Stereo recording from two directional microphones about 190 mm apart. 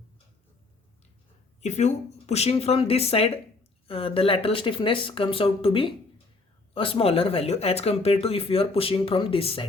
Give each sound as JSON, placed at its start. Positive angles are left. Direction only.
{"t": 1.6, "sound": "speech", "side_deg": 35}